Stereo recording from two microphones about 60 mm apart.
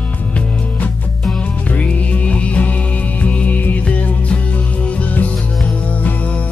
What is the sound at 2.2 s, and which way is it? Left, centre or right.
Music, left.